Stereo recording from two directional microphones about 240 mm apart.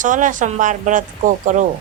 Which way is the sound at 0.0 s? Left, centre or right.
Right.